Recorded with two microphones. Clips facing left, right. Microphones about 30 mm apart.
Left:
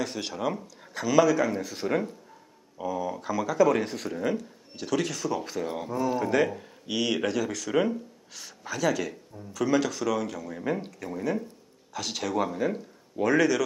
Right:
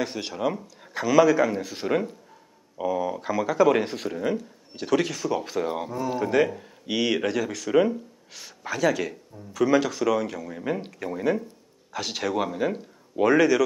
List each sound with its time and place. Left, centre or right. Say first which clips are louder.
0.0 s speech: right 3 dB; centre